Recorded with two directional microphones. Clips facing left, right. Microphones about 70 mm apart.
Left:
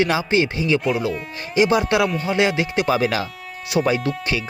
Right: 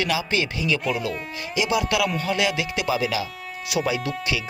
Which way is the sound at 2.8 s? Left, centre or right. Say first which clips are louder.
Left 2 dB; left.